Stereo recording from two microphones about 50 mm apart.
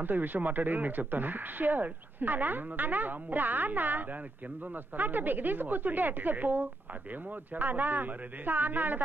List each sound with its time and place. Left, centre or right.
0.0 s speech: right